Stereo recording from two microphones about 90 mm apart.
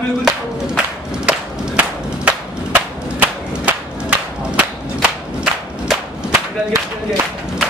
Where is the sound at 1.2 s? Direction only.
15° right (ahead or behind).